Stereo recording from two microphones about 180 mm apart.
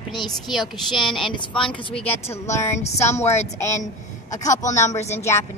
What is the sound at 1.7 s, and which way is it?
Speech, 30° left (ahead or behind).